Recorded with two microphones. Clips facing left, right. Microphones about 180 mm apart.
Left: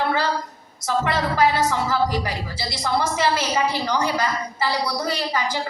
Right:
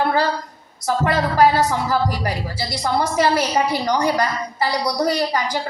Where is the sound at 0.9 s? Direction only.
45° right (ahead or behind).